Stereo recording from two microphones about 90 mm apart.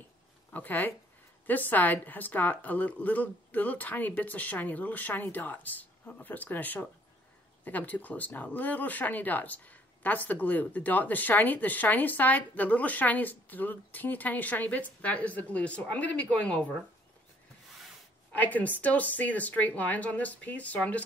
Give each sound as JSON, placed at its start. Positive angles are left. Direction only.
{"t": 0.5, "sound": "a woman's voice", "side_deg": 20}
{"t": 18.3, "sound": "speech", "side_deg": 20}